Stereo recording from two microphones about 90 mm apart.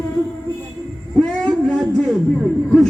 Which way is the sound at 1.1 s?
10° left (ahead or behind).